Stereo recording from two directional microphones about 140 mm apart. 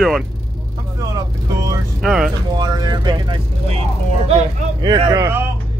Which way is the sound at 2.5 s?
30° right (ahead or behind).